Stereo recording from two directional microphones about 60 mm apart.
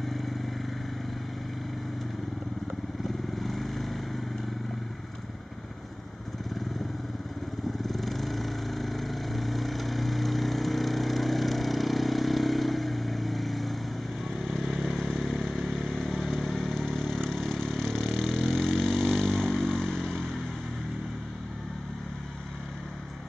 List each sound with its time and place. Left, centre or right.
0.0 s vehicle: centre
3.3 s vehicle: centre
7.8 s vehicle: centre
14.3 s motorcycle: centre